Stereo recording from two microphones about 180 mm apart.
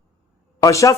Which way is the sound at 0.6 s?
20° left (ahead or behind).